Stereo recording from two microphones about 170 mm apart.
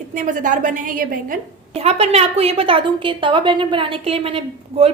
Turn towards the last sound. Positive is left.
turn(degrees=-35)  # may be behind; listen again after turning